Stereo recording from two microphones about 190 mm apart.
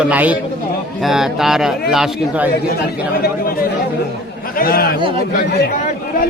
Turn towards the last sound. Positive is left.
turn(degrees=50)  # may be behind; listen again after turning